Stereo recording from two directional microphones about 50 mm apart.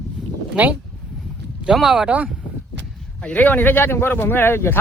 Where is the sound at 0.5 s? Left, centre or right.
Right.